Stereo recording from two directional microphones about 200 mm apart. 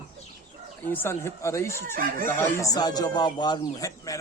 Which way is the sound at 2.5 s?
20° left (ahead or behind).